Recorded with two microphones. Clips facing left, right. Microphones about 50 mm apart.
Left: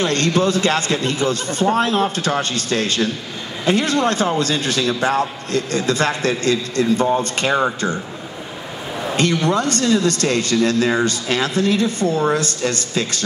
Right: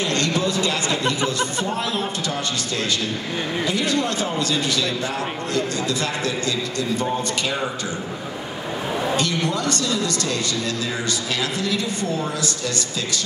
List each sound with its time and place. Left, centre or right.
0.0 s a man's voice: left
9.1 s a man's voice: left